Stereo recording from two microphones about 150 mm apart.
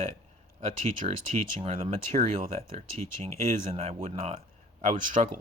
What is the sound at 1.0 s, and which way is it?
Speech, 40° right (ahead or behind).